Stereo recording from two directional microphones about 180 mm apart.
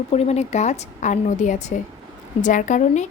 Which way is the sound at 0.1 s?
35° left (ahead or behind).